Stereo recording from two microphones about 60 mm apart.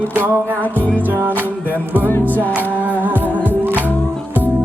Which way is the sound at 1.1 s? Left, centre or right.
Right.